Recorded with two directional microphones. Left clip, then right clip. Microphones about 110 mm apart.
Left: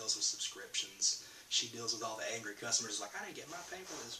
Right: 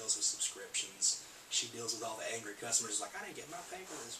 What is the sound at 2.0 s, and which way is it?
A man's voice, 25° left (ahead or behind).